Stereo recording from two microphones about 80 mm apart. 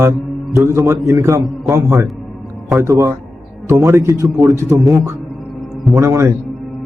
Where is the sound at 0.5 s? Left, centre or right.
Right.